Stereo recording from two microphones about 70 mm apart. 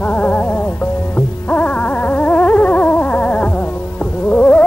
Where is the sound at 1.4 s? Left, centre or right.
Centre.